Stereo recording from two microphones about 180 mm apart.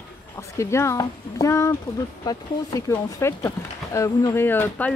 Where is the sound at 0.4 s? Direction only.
15° left (ahead or behind).